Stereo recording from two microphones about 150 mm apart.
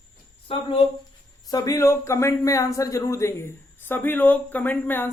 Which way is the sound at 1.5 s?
25° left (ahead or behind).